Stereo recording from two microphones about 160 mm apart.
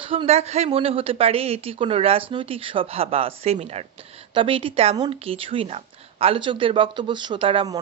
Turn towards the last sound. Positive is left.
turn(degrees=-35)  # may be behind; listen again after turning